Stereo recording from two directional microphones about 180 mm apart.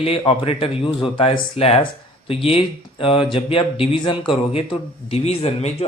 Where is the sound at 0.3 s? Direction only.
30° left (ahead or behind).